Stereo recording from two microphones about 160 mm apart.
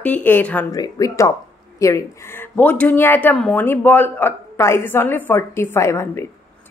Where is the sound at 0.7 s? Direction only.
20° left (ahead or behind).